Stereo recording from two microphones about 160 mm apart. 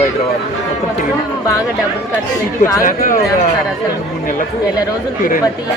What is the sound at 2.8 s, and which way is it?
Speech, 55° left (ahead or behind).